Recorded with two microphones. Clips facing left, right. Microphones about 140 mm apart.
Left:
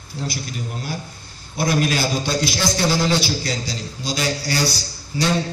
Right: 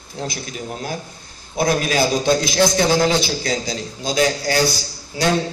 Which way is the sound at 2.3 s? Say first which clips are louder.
Right 5 dB; 50° right (ahead or behind).